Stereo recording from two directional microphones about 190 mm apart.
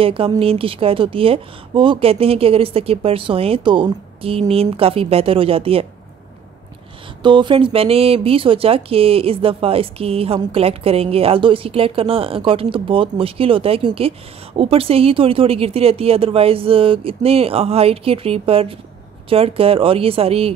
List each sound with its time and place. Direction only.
0.0 s speech: 30° right (ahead or behind)
7.2 s speech: 25° right (ahead or behind)